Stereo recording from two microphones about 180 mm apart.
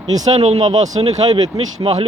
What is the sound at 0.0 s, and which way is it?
Speech, 20° right (ahead or behind).